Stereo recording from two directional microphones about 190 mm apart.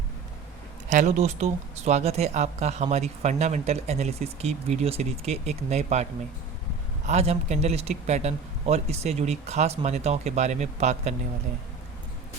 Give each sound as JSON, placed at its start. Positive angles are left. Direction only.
{"t": 0.9, "sound": "speech", "side_deg": -40}
{"t": 7.1, "sound": "speech", "side_deg": -35}